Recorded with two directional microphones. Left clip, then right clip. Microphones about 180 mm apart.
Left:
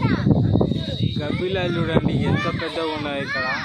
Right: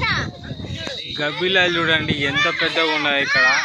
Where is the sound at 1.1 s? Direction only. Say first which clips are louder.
Right 8 dB; centre (ahead or behind).